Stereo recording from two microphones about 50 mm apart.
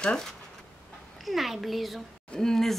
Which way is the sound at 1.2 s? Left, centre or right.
Centre.